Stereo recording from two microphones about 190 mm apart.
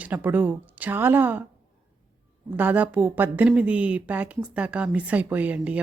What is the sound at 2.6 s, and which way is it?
A woman's voice, 10° right (ahead or behind).